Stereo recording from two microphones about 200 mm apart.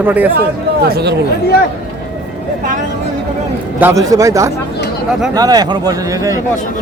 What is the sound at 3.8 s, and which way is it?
Speech, 15° right (ahead or behind).